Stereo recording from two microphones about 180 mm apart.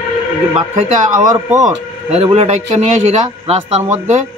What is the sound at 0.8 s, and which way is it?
Speech, 40° right (ahead or behind).